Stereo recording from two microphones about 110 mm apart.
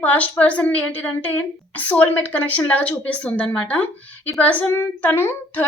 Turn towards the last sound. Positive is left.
turn(degrees=20)  # may be behind; listen again after turning